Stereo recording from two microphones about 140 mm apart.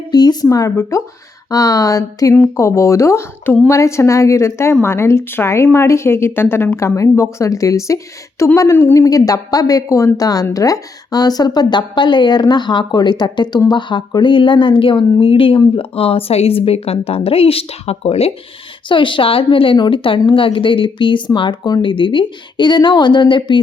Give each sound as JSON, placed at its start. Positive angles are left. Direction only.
{"t": 0.1, "sound": "a woman's voice", "side_deg": 30}
{"t": 18.9, "sound": "a woman's voice", "side_deg": 35}